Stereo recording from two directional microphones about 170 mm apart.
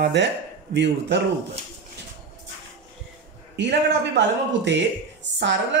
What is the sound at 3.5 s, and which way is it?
A woman's voice, 90° right.